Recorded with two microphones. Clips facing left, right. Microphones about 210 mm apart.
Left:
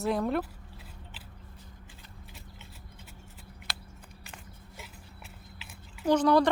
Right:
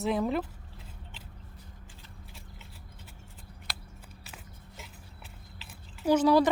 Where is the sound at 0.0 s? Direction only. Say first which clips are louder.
Even; centre (ahead or behind).